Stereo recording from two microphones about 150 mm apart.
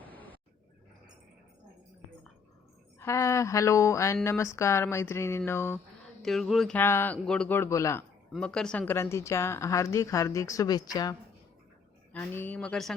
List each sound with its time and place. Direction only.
0.0 s a sound: 10° left (ahead or behind)
3.0 s speech: 20° left (ahead or behind)
6.2 s speech: centre (ahead or behind)
6.7 s speech: 15° left (ahead or behind)
8.3 s speech: 5° left (ahead or behind); by 11.2 s 25° left (ahead or behind)
12.1 s speech: 15° left (ahead or behind)